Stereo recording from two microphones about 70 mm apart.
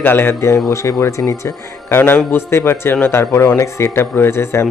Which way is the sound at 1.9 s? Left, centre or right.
Left.